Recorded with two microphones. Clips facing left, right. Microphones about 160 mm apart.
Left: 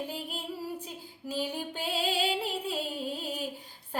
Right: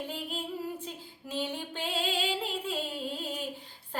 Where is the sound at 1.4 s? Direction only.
10° left (ahead or behind).